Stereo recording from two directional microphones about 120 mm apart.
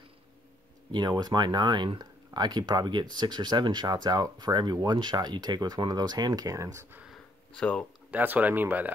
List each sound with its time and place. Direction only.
0.9 s speech: 35° right (ahead or behind)
7.5 s speech: 10° left (ahead or behind)
8.1 s speech: 15° right (ahead or behind)